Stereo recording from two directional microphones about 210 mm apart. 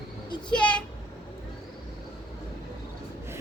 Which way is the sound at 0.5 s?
5° left (ahead or behind).